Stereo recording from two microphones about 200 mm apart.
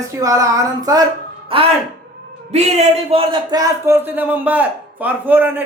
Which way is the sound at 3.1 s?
25° right (ahead or behind).